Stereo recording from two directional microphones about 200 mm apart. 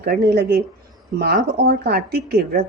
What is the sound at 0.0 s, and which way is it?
Speech, 50° right (ahead or behind).